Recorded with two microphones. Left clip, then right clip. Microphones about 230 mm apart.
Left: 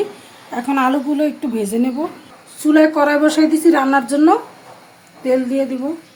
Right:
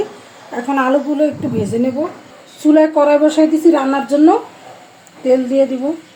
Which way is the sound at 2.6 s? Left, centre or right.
Centre.